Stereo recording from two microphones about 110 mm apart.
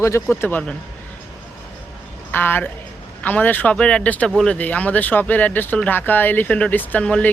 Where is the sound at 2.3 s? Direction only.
20° left (ahead or behind).